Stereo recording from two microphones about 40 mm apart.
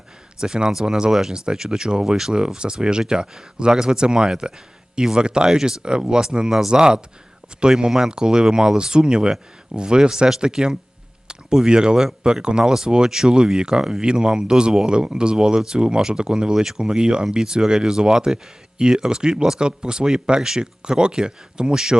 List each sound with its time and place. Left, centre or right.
0.3 s speech: centre
2.6 s speech: right